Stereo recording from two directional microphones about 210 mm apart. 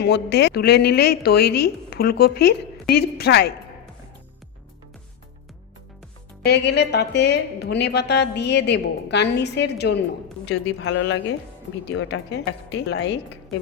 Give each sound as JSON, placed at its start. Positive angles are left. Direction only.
{"t": 0.0, "sound": "a woman's voice", "side_deg": 55}
{"t": 6.4, "sound": "a woman's voice", "side_deg": 50}
{"t": 10.5, "sound": "a woman's voice", "side_deg": 80}